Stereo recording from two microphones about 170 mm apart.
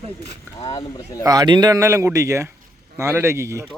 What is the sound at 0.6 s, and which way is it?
Speech, 25° left (ahead or behind).